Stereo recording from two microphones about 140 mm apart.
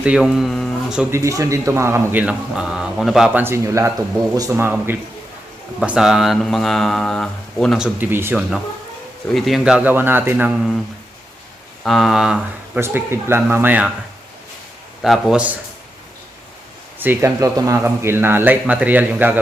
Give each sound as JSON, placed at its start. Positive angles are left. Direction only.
{"t": 0.0, "sound": "speech", "side_deg": -5}
{"t": 1.1, "sound": "a man's voice", "side_deg": -20}
{"t": 2.2, "sound": "speech", "side_deg": -5}
{"t": 3.4, "sound": "a man's voice", "side_deg": -20}
{"t": 7.8, "sound": "speech", "side_deg": -15}
{"t": 9.3, "sound": "speech", "side_deg": -5}
{"t": 11.8, "sound": "speech", "side_deg": 0}
{"t": 12.8, "sound": "speech", "side_deg": -15}
{"t": 15.0, "sound": "speech", "side_deg": 0}
{"t": 17.0, "sound": "speech", "side_deg": -15}